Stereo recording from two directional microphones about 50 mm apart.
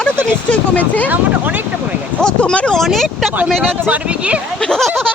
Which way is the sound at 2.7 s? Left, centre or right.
Centre.